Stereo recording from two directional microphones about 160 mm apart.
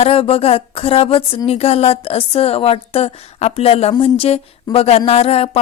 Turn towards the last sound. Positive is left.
turn(degrees=40)  # may be behind; listen again after turning